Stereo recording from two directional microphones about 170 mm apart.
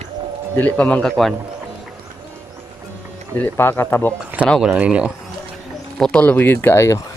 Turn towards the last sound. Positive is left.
turn(degrees=15)  # may be behind; listen again after turning